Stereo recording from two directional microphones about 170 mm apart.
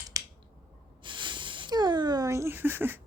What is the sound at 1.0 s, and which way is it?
Speech, 30° right (ahead or behind).